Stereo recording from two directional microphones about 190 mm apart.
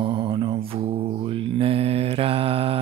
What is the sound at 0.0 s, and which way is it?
Mantra, 30° right (ahead or behind).